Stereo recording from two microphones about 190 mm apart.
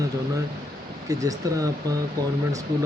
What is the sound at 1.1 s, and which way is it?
Speech, 20° right (ahead or behind).